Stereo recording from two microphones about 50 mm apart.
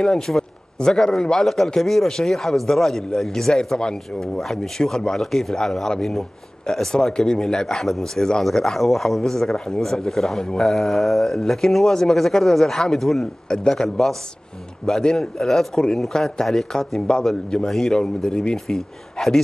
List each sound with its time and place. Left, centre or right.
0.3 s a man's voice: centre